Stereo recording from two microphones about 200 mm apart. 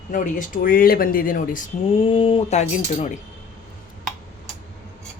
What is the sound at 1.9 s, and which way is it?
Speech, 25° left (ahead or behind).